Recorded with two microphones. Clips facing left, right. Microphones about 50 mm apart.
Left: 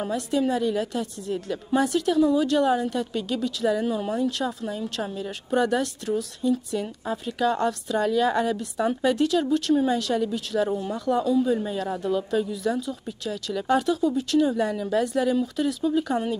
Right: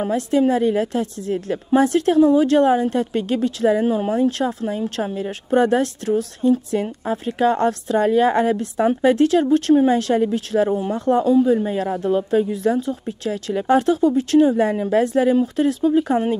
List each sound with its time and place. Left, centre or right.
0.1 s a woman's voice: right